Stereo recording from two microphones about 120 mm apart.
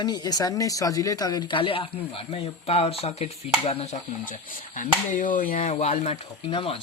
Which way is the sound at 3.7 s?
70° left (ahead or behind).